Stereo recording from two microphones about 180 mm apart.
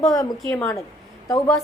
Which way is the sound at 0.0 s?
20° left (ahead or behind).